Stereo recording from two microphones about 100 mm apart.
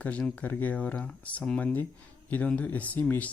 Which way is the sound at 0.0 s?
10° left (ahead or behind).